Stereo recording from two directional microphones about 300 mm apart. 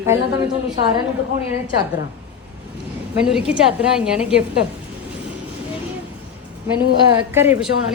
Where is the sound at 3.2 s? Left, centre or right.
Centre.